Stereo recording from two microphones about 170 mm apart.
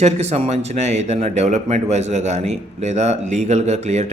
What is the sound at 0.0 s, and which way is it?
Speech, 40° right (ahead or behind).